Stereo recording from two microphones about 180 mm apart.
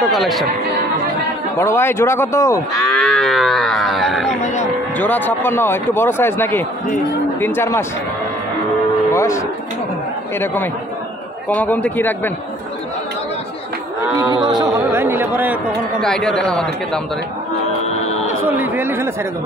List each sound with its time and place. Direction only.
0.1 s speech: centre (ahead or behind)
1.6 s speech: 15° left (ahead or behind)
2.9 s livestock: centre (ahead or behind)
4.3 s speech: 40° left (ahead or behind)
4.9 s speech: 10° left (ahead or behind)
9.1 s music: 15° left (ahead or behind)
10.4 s speech: 10° left (ahead or behind)
14.4 s a sound: 25° right (ahead or behind)
14.8 s a sound: 10° right (ahead or behind)
16.0 s speech: 5° left (ahead or behind)
18.5 s speech: 10° right (ahead or behind)